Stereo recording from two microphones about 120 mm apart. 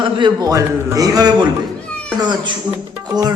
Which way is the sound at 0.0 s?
40° right (ahead or behind).